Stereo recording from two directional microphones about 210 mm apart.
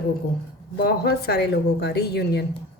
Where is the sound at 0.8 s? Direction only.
50° left (ahead or behind).